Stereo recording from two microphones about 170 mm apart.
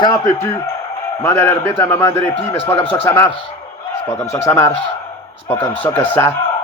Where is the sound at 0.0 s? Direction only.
20° left (ahead or behind).